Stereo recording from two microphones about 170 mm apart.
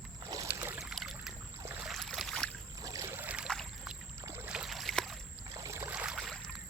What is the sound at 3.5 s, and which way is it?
Boat, 5° left (ahead or behind).